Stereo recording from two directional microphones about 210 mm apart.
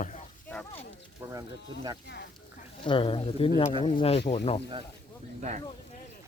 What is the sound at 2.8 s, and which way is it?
Speech, 25° left (ahead or behind).